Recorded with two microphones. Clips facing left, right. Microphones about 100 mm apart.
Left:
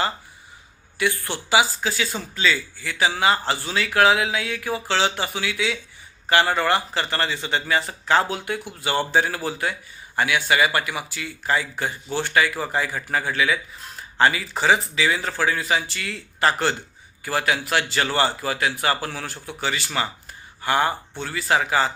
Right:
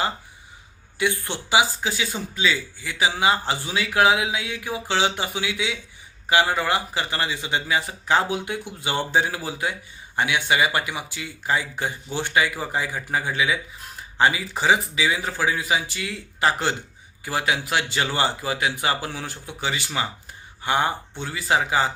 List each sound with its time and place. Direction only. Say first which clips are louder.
0.9 s speech: even; 20° right (ahead or behind)